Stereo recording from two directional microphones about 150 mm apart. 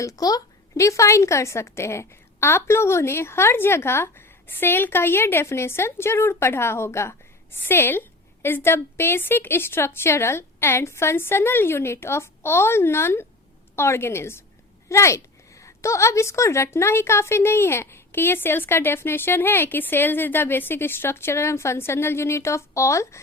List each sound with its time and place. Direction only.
0.0 s a woman's voice: 25° left (ahead or behind)